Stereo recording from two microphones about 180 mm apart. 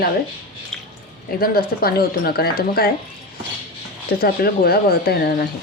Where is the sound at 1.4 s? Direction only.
55° left (ahead or behind).